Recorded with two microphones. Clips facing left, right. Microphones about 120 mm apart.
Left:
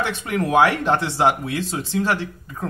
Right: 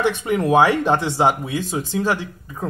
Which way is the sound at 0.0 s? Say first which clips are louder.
Right 4 dB; 15° right (ahead or behind).